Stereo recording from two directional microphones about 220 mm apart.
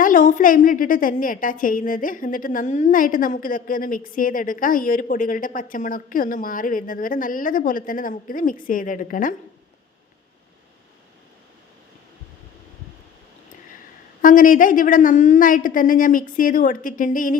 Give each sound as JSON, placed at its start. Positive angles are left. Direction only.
{"t": 0.0, "sound": "a woman's voice", "side_deg": 40}
{"t": 14.2, "sound": "a woman's voice", "side_deg": 40}